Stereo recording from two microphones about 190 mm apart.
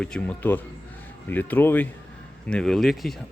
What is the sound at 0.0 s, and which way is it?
A man's voice, 5° left (ahead or behind).